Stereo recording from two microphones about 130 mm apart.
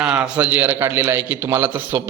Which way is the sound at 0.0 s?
10° right (ahead or behind).